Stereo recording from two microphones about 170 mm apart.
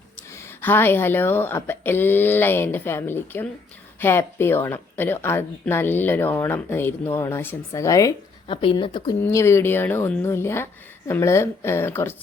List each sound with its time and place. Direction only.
0.2 s speech: 15° left (ahead or behind)
8.4 s speech: 30° left (ahead or behind)
9.2 s speech: 15° left (ahead or behind)